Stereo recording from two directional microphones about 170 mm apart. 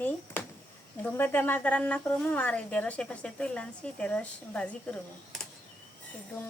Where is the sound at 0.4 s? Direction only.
10° left (ahead or behind).